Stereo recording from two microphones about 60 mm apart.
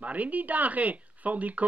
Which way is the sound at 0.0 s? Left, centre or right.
Right.